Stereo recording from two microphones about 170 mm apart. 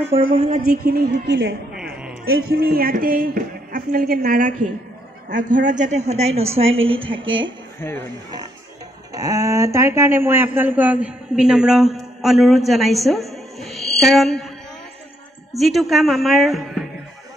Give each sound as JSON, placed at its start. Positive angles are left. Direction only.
{"t": 0.3, "sound": "a woman's voice", "side_deg": -35}
{"t": 0.8, "sound": "a woman's voice", "side_deg": -65}
{"t": 2.2, "sound": "a man's voice", "side_deg": -65}
{"t": 9.1, "sound": "speech", "side_deg": -20}
{"t": 15.5, "sound": "speech", "side_deg": 0}